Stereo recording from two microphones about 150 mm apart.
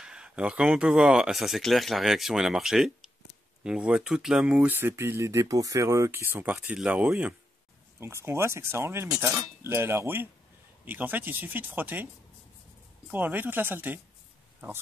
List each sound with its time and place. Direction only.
0.0 s speech: 5° right (ahead or behind)
13.1 s speech: 10° right (ahead or behind)